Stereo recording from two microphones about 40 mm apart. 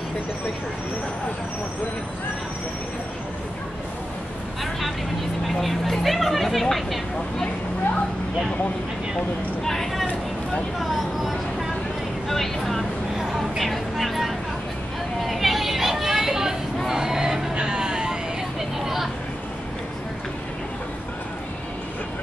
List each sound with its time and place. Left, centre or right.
5.6 s speech: centre
9.7 s a sound: centre
10.8 s speech: centre
13.2 s a sound: centre
13.6 s speech: centre
15.2 s vehicle: centre
17.6 s music: right